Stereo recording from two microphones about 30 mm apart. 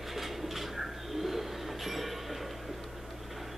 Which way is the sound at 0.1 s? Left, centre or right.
Centre.